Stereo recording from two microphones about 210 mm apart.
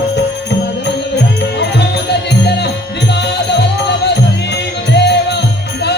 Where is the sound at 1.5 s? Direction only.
55° left (ahead or behind).